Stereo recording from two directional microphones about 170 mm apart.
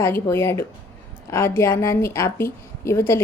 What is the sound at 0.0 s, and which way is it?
A woman's voice, 15° left (ahead or behind).